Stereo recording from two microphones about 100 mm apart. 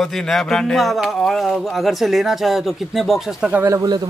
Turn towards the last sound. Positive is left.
turn(degrees=-30)  # may be behind; listen again after turning